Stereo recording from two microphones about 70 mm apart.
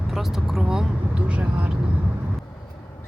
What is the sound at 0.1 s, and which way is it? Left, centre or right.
Speech, centre.